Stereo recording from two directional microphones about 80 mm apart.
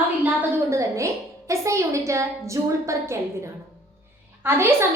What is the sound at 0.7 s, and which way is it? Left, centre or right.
A woman's voice, right.